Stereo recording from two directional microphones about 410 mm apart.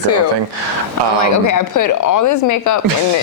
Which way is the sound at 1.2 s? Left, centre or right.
Left.